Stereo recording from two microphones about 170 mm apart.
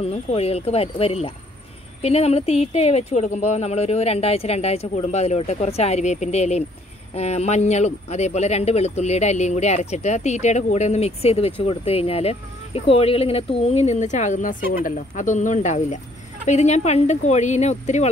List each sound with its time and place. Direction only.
0.0 s speech: 35° left (ahead or behind)